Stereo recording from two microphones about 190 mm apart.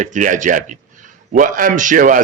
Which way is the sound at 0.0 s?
40° right (ahead or behind).